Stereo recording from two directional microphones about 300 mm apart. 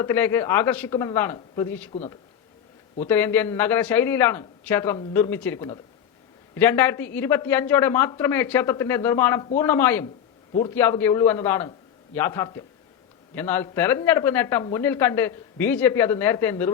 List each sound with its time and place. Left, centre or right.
0.0 s speech: centre
1.9 s a man's voice: centre
3.0 s speech: centre